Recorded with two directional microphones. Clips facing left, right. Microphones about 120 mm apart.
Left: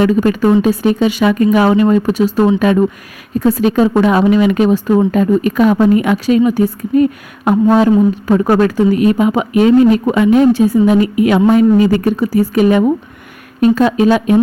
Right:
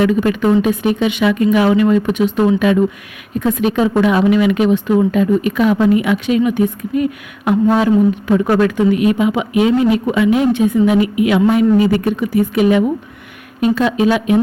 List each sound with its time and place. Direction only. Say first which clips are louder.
0.0 s speech: left 2 dB; 35° left (ahead or behind)